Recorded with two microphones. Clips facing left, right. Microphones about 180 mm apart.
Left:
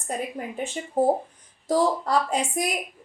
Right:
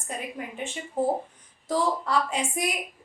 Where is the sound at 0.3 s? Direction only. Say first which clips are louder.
Left 4 dB; 40° left (ahead or behind).